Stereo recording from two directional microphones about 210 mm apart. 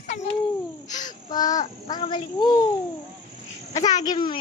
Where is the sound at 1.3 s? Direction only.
20° left (ahead or behind).